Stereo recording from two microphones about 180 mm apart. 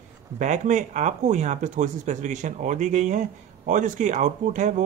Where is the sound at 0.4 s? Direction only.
40° right (ahead or behind).